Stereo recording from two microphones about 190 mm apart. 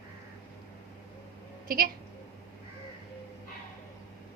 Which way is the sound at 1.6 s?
50° right (ahead or behind).